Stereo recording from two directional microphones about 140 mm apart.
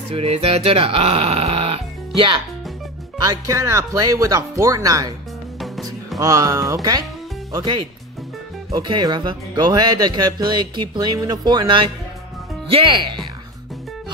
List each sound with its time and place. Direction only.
0.1 s speech: 45° right (ahead or behind)
3.3 s speech: 20° right (ahead or behind)
6.1 s speech: 25° right (ahead or behind)
8.7 s speech: 30° right (ahead or behind)